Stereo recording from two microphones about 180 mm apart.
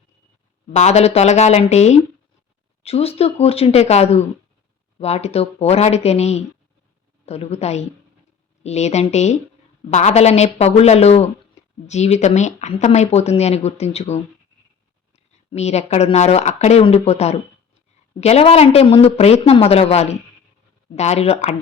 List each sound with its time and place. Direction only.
0.8 s speech: 40° left (ahead or behind)